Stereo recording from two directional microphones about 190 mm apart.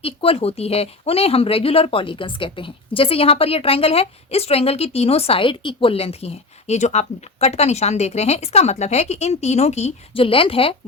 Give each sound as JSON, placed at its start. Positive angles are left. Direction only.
{"t": 0.0, "sound": "speech", "side_deg": 30}